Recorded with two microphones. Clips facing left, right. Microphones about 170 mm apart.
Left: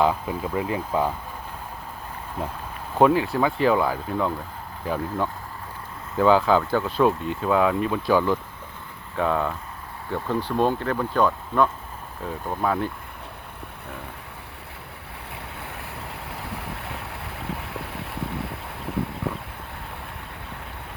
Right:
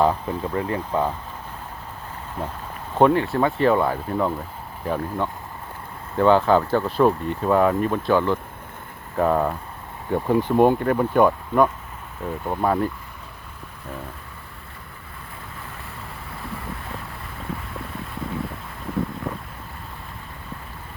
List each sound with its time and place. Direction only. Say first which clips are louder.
0.0 s speech: right 2 dB; 5° left (ahead or behind)
3.0 s speech: right 1 dB; 5° left (ahead or behind)
9.1 s speech: right 4 dB; 5° right (ahead or behind)
10.1 s speech: right 6 dB; 15° right (ahead or behind)
15.5 s boat: left 1 dB; 70° left (ahead or behind)